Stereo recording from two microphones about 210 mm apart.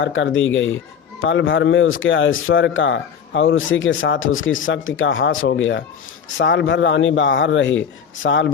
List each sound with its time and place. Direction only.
0.0 s a man's voice: 65° left (ahead or behind)